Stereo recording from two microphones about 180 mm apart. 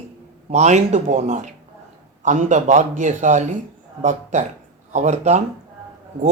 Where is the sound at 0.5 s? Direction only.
40° right (ahead or behind).